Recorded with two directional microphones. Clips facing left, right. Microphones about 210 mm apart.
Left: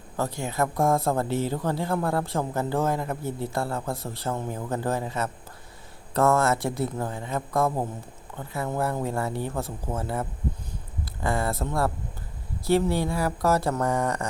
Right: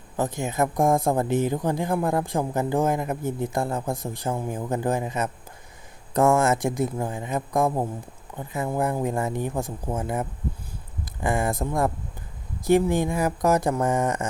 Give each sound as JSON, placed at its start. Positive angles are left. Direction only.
{"t": 0.2, "sound": "speech", "side_deg": -20}
{"t": 10.7, "sound": "a sound", "side_deg": -15}
{"t": 12.6, "sound": "speech", "side_deg": -15}